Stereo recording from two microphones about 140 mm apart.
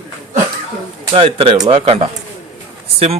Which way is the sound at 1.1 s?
40° right (ahead or behind).